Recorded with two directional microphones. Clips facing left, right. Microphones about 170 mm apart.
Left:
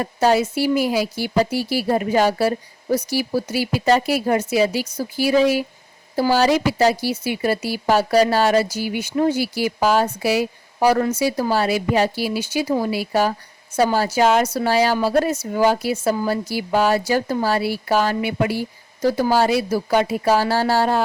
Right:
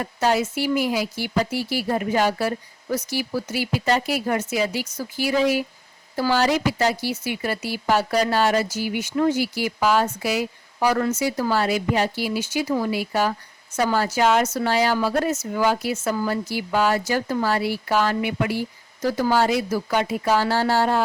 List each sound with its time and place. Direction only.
0.0 s speech: 30° left (ahead or behind)